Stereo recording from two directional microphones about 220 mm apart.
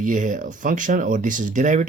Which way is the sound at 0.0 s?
35° right (ahead or behind).